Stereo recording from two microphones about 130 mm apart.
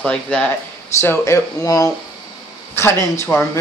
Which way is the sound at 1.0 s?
20° left (ahead or behind).